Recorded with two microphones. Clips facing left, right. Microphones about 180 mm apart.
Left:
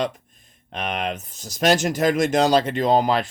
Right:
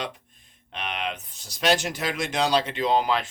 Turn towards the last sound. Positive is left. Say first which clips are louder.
# left 4 dB
turn(degrees=40)  # may be behind; listen again after turning